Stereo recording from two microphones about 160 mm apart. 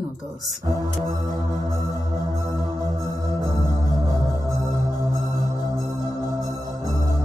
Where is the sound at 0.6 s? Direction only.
25° right (ahead or behind).